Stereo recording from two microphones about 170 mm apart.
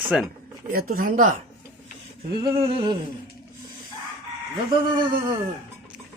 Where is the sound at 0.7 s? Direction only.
60° right (ahead or behind).